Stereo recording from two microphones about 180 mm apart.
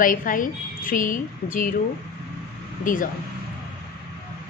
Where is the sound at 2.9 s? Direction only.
50° left (ahead or behind).